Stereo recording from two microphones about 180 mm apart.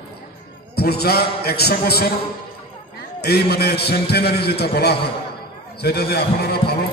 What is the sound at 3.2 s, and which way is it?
A man's voice, 60° left (ahead or behind).